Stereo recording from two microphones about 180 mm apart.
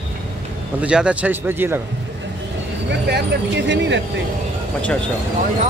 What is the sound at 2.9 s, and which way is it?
Speech, 70° right (ahead or behind).